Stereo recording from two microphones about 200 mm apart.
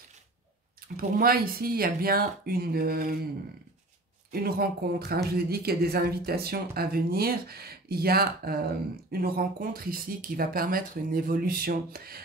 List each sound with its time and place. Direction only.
1.2 s speech: 50° right (ahead or behind)
4.3 s speech: 50° right (ahead or behind)